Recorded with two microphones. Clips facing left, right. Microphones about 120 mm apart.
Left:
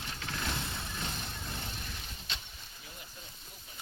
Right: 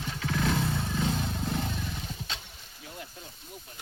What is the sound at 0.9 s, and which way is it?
Vehicle, 90° right.